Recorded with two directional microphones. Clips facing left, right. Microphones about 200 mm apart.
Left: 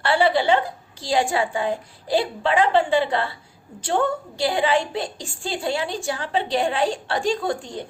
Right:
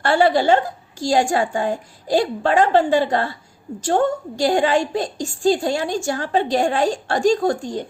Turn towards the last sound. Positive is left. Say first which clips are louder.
# right 6 dB
turn(degrees=-45)  # may be behind; listen again after turning